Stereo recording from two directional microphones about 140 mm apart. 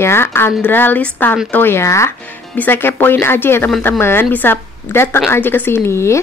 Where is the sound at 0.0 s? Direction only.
15° left (ahead or behind).